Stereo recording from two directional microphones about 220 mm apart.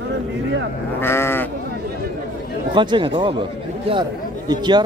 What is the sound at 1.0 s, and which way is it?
Speech, 10° left (ahead or behind).